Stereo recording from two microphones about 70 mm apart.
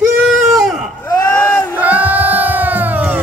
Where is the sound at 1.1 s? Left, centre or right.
Left.